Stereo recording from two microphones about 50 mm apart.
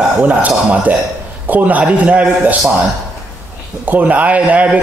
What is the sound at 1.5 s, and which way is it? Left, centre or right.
Speech, right.